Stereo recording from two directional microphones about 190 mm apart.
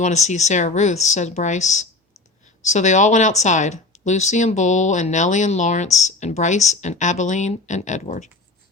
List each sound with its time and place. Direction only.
0.0 s speech: 40° left (ahead or behind)